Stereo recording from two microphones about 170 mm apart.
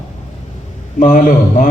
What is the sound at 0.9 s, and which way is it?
Speech, 45° left (ahead or behind).